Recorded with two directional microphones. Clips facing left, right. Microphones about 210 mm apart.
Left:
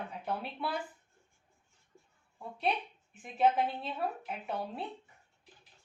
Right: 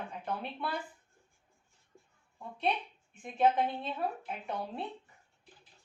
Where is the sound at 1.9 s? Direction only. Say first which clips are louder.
Right 1 dB; 15° right (ahead or behind).